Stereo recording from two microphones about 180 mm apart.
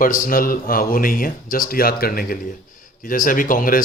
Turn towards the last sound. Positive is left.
turn(degrees=50)  # may be behind; listen again after turning